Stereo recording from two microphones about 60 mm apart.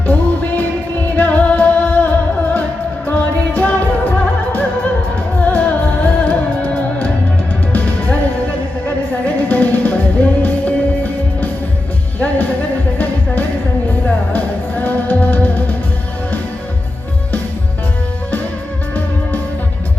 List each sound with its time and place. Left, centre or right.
0.1 s music: left
9.2 s music: left
14.3 s music: left